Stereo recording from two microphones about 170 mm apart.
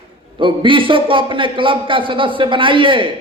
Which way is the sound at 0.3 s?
30° right (ahead or behind).